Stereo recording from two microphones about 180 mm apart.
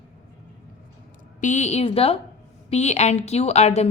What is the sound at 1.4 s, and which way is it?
A woman's voice, 40° left (ahead or behind).